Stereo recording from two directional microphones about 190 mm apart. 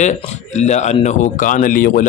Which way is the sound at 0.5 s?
35° left (ahead or behind).